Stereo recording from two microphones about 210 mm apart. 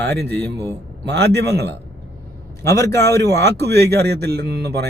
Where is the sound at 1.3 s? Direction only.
50° right (ahead or behind).